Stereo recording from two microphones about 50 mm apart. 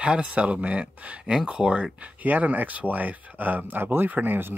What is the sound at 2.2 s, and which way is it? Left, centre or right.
Speech, right.